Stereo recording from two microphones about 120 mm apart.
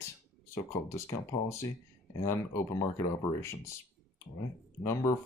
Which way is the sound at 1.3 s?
30° left (ahead or behind).